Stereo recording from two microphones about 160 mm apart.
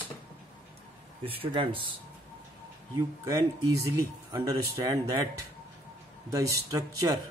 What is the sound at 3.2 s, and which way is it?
Speech, 20° right (ahead or behind).